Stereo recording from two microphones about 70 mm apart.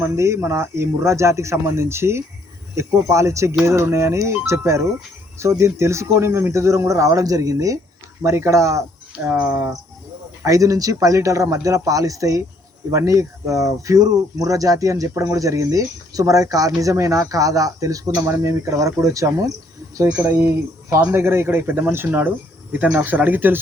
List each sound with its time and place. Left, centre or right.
0.0 s speech: right
8.2 s speech: right
10.4 s speech: right
18.3 s speech: right
20.2 s speech: right
22.7 s speech: centre